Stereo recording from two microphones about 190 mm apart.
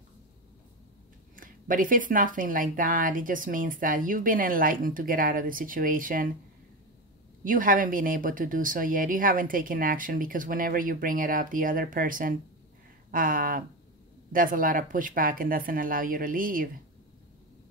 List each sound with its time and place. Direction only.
1.3 s speech: 45° right (ahead or behind)
7.4 s speech: 45° right (ahead or behind)